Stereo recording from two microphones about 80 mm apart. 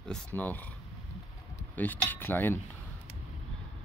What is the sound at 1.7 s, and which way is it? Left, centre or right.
Speech, left.